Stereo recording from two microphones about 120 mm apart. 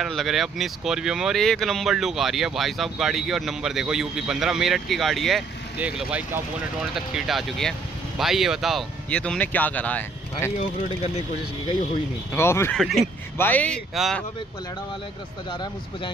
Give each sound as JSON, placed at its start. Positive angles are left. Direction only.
{"t": 0.0, "sound": "speech", "side_deg": 0}
{"t": 5.8, "sound": "speech", "side_deg": -10}
{"t": 9.1, "sound": "speech", "side_deg": 10}
{"t": 12.4, "sound": "speech", "side_deg": 20}
{"t": 12.7, "sound": "speech", "side_deg": 0}
{"t": 13.4, "sound": "speech", "side_deg": 15}
{"t": 14.0, "sound": "speech", "side_deg": 0}
{"t": 15.5, "sound": "speech", "side_deg": 40}